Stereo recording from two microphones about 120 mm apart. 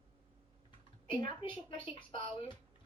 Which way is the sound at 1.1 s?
45° left (ahead or behind).